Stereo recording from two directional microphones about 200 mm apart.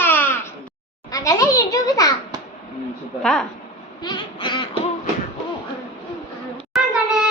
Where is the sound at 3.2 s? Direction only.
Centre (ahead or behind).